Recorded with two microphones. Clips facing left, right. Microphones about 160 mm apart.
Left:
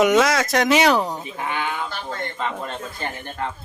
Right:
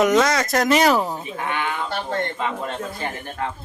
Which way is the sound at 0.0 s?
Centre (ahead or behind).